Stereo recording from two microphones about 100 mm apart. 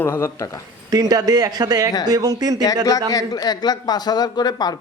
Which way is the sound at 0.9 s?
40° right (ahead or behind).